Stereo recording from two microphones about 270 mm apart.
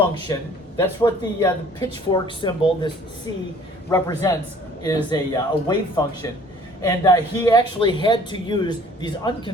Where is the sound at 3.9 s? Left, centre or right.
Centre.